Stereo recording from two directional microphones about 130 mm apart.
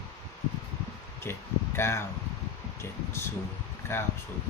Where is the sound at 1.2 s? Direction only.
20° left (ahead or behind).